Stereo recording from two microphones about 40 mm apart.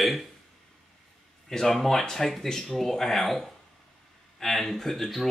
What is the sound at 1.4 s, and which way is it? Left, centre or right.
Speech, centre.